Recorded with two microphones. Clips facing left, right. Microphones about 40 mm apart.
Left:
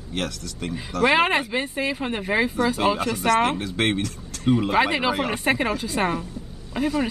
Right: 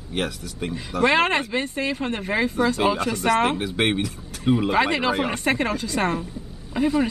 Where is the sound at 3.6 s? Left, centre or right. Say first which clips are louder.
Right 1 dB; centre.